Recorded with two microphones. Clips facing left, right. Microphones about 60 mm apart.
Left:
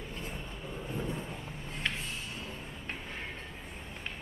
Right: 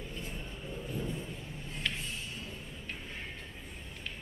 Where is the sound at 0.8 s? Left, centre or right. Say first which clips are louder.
Left 2 dB; left.